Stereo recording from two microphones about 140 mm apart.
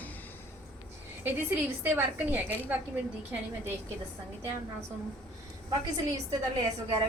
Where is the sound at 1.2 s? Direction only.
15° right (ahead or behind).